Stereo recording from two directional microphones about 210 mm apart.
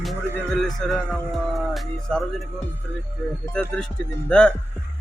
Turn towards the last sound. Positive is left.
turn(degrees=5)  # may be behind; listen again after turning